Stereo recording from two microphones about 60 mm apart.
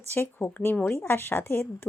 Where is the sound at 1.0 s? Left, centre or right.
Left.